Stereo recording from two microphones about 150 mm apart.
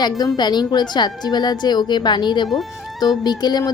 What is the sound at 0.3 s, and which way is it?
A woman's voice, 30° left (ahead or behind).